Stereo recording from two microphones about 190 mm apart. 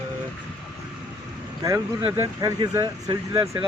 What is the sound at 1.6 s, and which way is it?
Speech, 20° right (ahead or behind).